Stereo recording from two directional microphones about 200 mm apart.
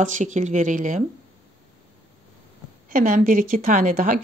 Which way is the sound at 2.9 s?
45° right (ahead or behind).